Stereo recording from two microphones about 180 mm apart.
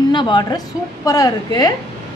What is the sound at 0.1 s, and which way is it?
A woman's voice, 25° left (ahead or behind).